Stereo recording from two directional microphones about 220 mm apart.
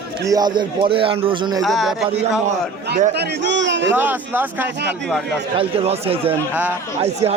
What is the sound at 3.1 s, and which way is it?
Speech, 50° right (ahead or behind).